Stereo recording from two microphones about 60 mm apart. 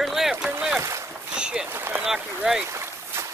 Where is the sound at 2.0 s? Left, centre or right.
Centre.